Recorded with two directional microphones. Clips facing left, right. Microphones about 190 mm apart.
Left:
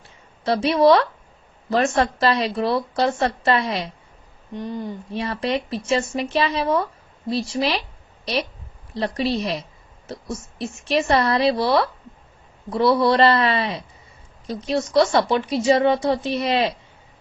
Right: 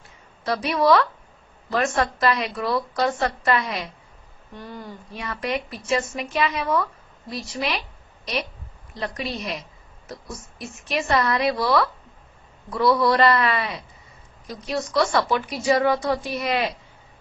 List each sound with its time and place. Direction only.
0.4 s a woman's voice: 30° left (ahead or behind)